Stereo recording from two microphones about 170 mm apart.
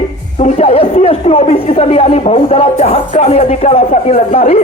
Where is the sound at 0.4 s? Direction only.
35° left (ahead or behind).